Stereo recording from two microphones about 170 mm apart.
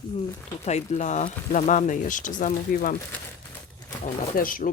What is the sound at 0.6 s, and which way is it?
Speech, 40° left (ahead or behind).